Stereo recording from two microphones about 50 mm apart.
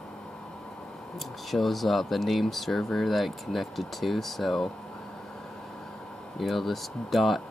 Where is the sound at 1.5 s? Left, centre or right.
Centre.